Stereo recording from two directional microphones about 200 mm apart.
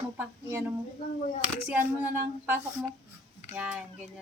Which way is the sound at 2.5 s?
10° right (ahead or behind).